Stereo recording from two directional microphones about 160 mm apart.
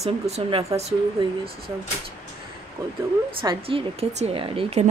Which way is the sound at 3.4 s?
30° right (ahead or behind).